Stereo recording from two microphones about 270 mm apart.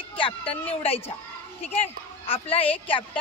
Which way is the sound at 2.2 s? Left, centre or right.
Left.